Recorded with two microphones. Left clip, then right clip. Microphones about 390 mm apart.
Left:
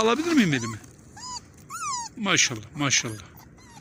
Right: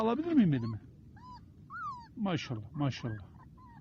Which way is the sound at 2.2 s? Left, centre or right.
Right.